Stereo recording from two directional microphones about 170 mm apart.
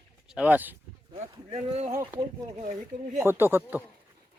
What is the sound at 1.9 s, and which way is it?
Speech, 15° right (ahead or behind).